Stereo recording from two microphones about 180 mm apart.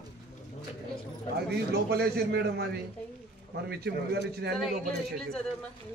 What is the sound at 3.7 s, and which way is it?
Speech, 65° right (ahead or behind).